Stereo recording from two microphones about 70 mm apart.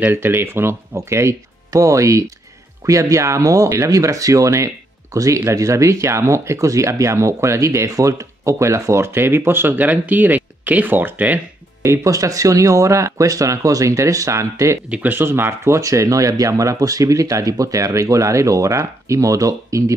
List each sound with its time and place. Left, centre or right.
0.0 s speech: right
11.8 s speech: right
14.9 s speech: right